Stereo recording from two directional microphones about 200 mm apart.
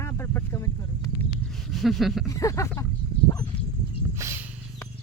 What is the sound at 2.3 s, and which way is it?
Speech, 15° left (ahead or behind).